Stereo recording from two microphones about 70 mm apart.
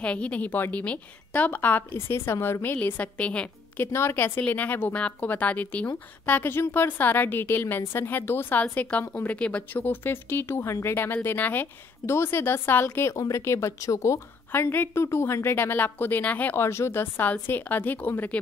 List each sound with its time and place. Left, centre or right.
0.0 s speech: centre
2.0 s a woman's voice: left
2.6 s speech: left
3.8 s a woman's voice: left
4.4 s a woman's voice: left
14.5 s a woman's voice: left
16.5 s a woman's voice: left